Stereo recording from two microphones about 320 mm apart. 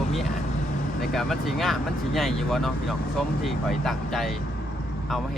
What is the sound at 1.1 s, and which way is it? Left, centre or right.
Speech, centre.